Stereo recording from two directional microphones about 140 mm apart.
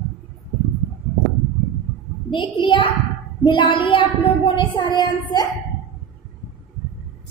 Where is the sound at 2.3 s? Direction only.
35° left (ahead or behind).